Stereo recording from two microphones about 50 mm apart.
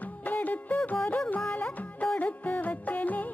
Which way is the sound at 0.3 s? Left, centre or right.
Left.